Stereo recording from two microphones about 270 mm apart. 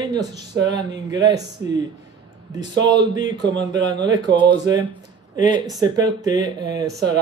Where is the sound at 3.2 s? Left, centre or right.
Centre.